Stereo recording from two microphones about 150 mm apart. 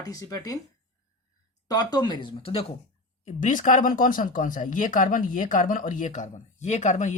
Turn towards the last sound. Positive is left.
turn(degrees=55)  # may be behind; listen again after turning